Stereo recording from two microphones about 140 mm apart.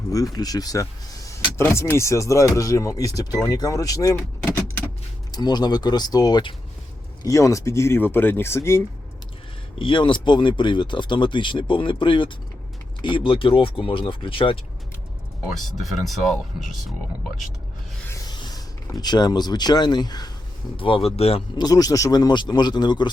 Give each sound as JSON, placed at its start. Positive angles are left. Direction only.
{"t": 0.3, "sound": "speech", "side_deg": 25}
{"t": 9.7, "sound": "speech", "side_deg": 35}
{"t": 15.4, "sound": "speech", "side_deg": 0}
{"t": 18.1, "sound": "rub", "side_deg": 30}
{"t": 18.9, "sound": "speech", "side_deg": 30}
{"t": 20.7, "sound": "speech", "side_deg": 40}
{"t": 21.5, "sound": "speech", "side_deg": 30}